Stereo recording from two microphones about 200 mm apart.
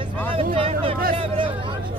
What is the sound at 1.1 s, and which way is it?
Hubbub, 25° right (ahead or behind).